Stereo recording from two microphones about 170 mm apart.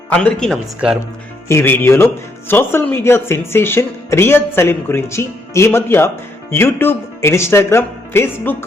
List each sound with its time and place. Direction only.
0.1 s speech: 5° left (ahead or behind)
1.5 s speech: 15° left (ahead or behind)